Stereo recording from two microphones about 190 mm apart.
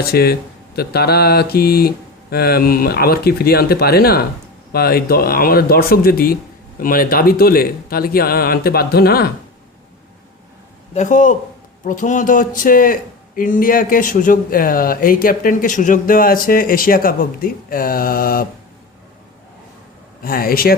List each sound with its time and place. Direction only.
0.0 s speech: 55° left (ahead or behind)
10.9 s a man's voice: 40° left (ahead or behind)
20.2 s speech: 50° left (ahead or behind)